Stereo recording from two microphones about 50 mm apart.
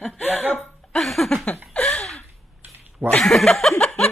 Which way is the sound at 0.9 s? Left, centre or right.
Centre.